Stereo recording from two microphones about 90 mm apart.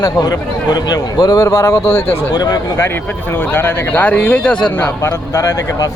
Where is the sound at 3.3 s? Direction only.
20° left (ahead or behind).